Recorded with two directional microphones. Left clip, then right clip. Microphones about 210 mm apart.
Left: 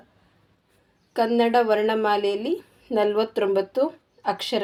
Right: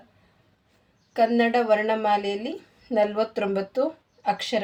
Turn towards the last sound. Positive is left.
turn(degrees=30)  # may be behind; listen again after turning